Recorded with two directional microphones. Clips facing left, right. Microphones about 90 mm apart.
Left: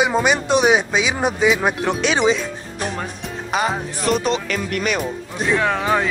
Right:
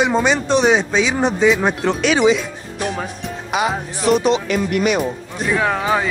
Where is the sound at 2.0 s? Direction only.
35° left (ahead or behind).